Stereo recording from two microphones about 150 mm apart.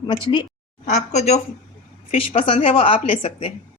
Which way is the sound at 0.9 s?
45° left (ahead or behind).